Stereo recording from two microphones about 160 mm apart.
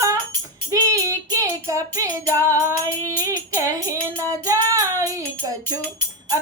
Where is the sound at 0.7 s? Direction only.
20° right (ahead or behind).